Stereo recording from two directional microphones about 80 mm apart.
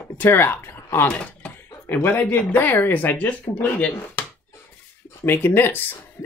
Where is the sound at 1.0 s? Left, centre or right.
Centre.